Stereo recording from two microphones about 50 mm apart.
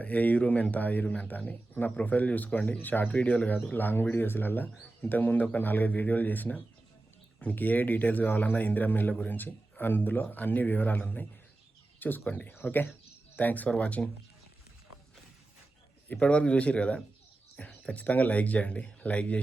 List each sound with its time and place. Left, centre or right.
0.0 s speech: left
12.3 s speech: left
12.6 s speech: left
16.1 s speech: left